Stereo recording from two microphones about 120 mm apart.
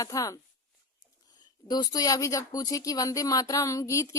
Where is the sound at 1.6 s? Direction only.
35° left (ahead or behind).